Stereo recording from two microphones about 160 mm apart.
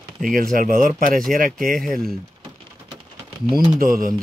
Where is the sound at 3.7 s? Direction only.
60° right (ahead or behind).